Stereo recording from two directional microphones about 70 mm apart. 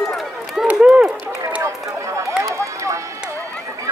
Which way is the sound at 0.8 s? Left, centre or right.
Centre.